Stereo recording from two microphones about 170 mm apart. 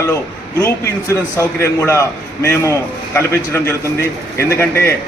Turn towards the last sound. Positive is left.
turn(degrees=15)  # may be behind; listen again after turning